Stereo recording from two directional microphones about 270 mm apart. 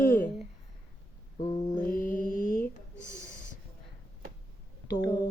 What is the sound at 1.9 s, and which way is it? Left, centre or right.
Mantra, left.